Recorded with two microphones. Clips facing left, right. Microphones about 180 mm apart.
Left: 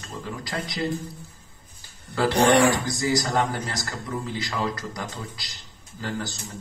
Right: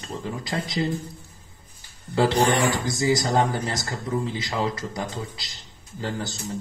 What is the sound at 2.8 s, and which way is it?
A man's voice, 25° right (ahead or behind).